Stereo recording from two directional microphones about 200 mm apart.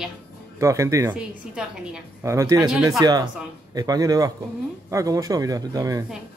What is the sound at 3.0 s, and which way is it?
Speech, 20° right (ahead or behind).